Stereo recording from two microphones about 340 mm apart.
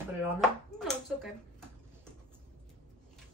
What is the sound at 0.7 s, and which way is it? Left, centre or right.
Speech, centre.